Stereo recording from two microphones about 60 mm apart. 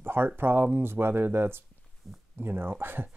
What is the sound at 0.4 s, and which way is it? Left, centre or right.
Speech, right.